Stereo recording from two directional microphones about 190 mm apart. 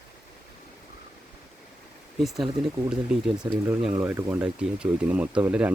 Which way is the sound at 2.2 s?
Centre (ahead or behind).